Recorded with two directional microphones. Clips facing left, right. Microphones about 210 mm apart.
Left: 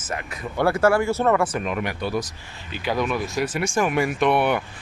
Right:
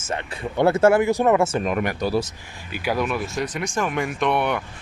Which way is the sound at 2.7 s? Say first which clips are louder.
Even; 10° right (ahead or behind).